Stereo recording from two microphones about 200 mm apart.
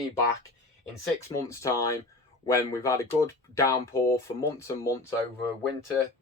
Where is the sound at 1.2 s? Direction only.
15° left (ahead or behind).